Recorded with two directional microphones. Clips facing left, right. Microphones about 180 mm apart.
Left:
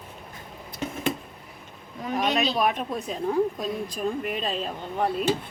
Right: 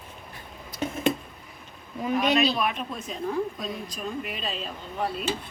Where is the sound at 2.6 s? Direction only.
40° left (ahead or behind).